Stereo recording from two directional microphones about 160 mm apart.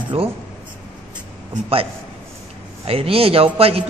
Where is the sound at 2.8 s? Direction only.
35° right (ahead or behind).